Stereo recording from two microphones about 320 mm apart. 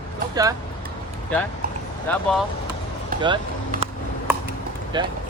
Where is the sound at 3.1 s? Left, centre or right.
Right.